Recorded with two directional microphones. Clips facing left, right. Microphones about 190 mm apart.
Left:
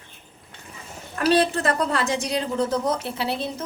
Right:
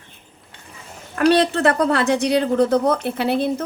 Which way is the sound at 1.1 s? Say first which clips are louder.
Right 4 dB; 65° right (ahead or behind).